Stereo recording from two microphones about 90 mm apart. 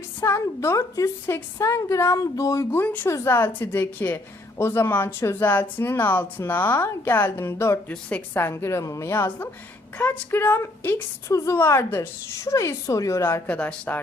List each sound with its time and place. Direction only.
0.2 s a woman's voice: 30° left (ahead or behind)
2.8 s a woman's voice: 20° left (ahead or behind)
7.9 s a woman's voice: 20° left (ahead or behind)
11.3 s a woman's voice: 35° left (ahead or behind)
13.5 s speech: 15° left (ahead or behind)